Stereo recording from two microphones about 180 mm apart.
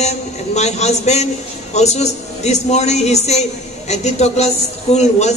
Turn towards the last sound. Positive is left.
turn(degrees=40)  # may be behind; listen again after turning